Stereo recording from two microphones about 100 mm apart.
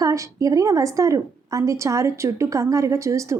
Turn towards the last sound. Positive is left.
turn(degrees=-30)  # may be behind; listen again after turning